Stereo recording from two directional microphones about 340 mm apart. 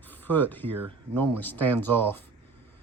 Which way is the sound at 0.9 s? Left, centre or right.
Right.